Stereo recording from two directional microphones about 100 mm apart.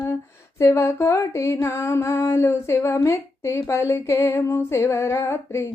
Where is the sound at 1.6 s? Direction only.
25° left (ahead or behind).